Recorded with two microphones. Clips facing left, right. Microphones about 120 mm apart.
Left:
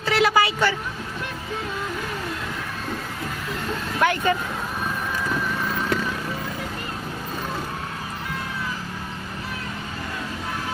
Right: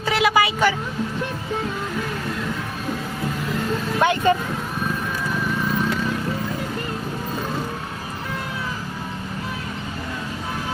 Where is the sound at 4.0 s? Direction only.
25° right (ahead or behind).